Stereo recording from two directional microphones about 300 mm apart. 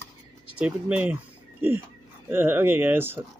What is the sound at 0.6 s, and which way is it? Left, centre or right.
Speech, centre.